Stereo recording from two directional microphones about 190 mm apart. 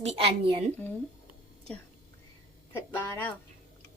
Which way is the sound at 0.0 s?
30° right (ahead or behind).